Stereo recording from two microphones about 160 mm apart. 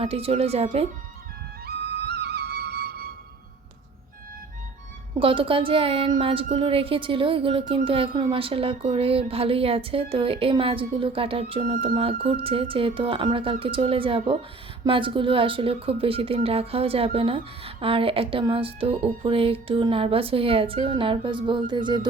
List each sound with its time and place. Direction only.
0.0 s speech: 35° right (ahead or behind)
1.6 s music: 90° right
5.2 s speech: 35° right (ahead or behind)